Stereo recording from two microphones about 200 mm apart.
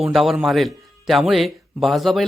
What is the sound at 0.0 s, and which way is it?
Speech, centre (ahead or behind).